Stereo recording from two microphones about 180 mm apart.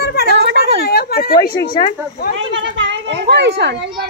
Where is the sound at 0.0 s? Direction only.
60° left (ahead or behind).